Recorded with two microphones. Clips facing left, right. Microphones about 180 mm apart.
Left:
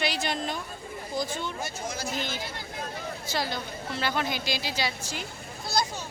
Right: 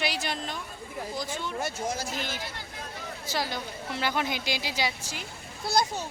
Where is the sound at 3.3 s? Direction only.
15° right (ahead or behind).